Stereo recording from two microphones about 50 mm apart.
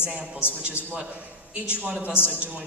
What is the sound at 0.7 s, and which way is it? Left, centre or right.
Speech, right.